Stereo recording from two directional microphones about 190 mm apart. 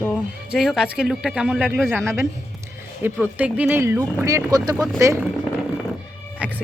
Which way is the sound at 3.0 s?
10° right (ahead or behind).